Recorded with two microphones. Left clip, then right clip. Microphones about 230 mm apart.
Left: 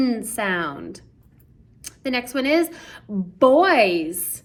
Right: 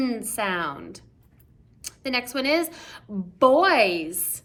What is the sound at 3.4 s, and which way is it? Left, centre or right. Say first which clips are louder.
Speech: left 2 dB; centre.